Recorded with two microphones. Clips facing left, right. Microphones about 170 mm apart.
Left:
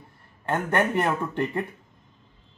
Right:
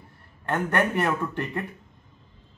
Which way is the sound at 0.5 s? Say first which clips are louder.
Left 1 dB; 25° left (ahead or behind).